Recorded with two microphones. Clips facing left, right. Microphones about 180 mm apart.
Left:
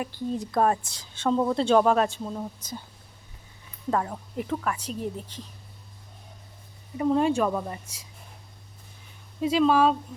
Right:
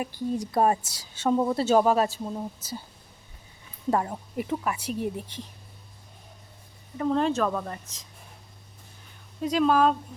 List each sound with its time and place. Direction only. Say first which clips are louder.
0.0 s a woman's voice: right 1 dB; 10° right (ahead or behind)
3.9 s a woman's voice: even; 15° right (ahead or behind)
6.9 s a woman's voice: left 2 dB; 10° left (ahead or behind)
9.4 s speech: left 1 dB; 5° left (ahead or behind)